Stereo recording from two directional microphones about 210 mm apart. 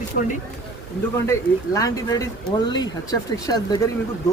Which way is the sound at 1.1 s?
15° left (ahead or behind).